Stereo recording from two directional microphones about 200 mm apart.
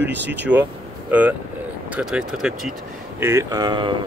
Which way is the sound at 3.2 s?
15° right (ahead or behind).